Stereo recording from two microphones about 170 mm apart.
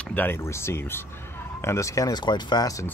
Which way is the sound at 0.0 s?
10° left (ahead or behind).